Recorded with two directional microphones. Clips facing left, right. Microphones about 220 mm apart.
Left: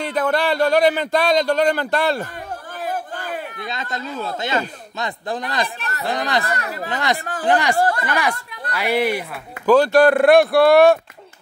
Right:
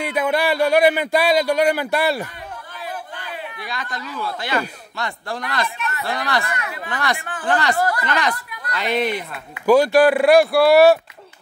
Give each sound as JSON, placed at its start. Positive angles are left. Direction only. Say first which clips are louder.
{"t": 0.0, "sound": "speech", "louder": "even", "side_deg": -10}
{"t": 2.8, "sound": "a sound", "louder": "left 6 dB", "side_deg": 45}
{"t": 3.6, "sound": "speech", "louder": "left 2 dB", "side_deg": 25}
{"t": 5.8, "sound": "speech", "louder": "right 2 dB", "side_deg": 35}
{"t": 6.0, "sound": "speech", "louder": "left 3 dB", "side_deg": 20}
{"t": 6.4, "sound": "speech", "louder": "left 3 dB", "side_deg": 35}
{"t": 6.9, "sound": "speech", "louder": "left 2 dB", "side_deg": 20}
{"t": 7.2, "sound": "speech", "louder": "left 4 dB", "side_deg": 40}
{"t": 7.4, "sound": "speech", "louder": "left 2 dB", "side_deg": 15}
{"t": 7.7, "sound": "speech", "louder": "left 2 dB", "side_deg": 30}
{"t": 8.1, "sound": "speech", "louder": "even", "side_deg": 10}
{"t": 9.7, "sound": "speech", "louder": "even", "side_deg": -10}